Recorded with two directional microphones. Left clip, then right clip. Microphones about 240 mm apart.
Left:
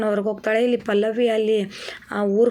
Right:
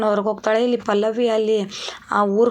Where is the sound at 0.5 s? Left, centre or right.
Right.